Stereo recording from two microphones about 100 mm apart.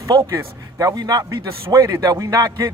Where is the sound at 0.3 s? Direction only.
35° right (ahead or behind).